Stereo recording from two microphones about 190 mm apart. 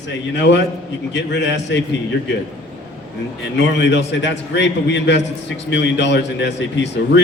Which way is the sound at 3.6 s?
65° left (ahead or behind).